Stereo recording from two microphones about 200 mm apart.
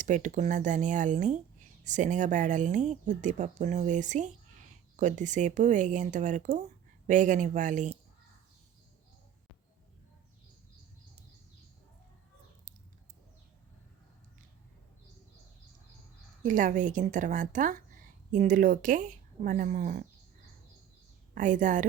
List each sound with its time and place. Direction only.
0.0 s speech: 40° right (ahead or behind)
16.4 s speech: 40° right (ahead or behind)
21.3 s speech: 40° right (ahead or behind)